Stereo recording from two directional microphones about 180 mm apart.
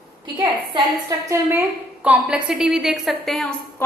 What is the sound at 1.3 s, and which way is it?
A woman's voice, 15° right (ahead or behind).